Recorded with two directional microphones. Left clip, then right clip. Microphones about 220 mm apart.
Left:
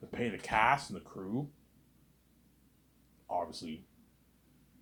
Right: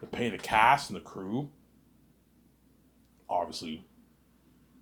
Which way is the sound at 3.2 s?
20° right (ahead or behind).